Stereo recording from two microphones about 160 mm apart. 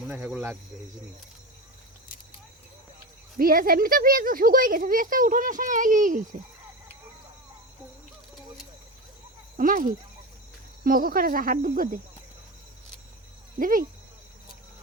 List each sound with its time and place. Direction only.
0.1 s speech: 10° right (ahead or behind)
3.3 s speech: 65° right (ahead or behind)
9.6 s speech: 60° right (ahead or behind)
13.6 s speech: 60° right (ahead or behind)